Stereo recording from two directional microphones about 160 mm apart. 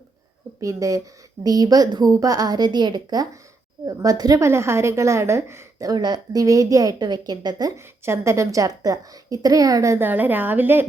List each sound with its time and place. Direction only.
0.6 s a woman's voice: 20° right (ahead or behind)